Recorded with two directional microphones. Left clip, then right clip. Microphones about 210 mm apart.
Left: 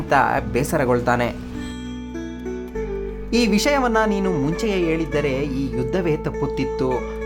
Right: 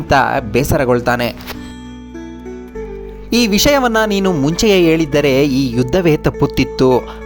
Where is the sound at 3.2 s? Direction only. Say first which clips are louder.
Right 7 dB; 25° right (ahead or behind).